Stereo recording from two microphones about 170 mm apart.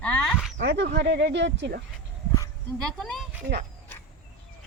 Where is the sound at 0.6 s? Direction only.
85° right.